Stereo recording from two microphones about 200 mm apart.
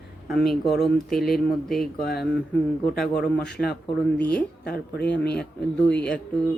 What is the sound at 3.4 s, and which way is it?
Speech, 55° left (ahead or behind).